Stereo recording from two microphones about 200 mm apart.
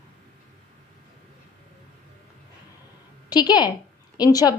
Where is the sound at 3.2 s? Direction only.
20° left (ahead or behind).